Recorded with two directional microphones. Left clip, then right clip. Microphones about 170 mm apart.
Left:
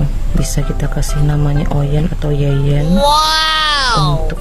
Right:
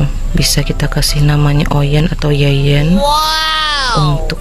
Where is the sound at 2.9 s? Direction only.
Centre (ahead or behind).